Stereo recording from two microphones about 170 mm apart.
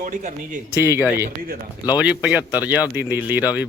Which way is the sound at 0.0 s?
45° right (ahead or behind).